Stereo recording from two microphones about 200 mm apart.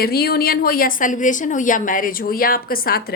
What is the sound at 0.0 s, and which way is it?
A woman's voice, 50° left (ahead or behind).